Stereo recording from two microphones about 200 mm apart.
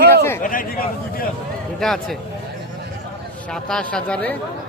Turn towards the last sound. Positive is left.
turn(degrees=5)  # may be behind; listen again after turning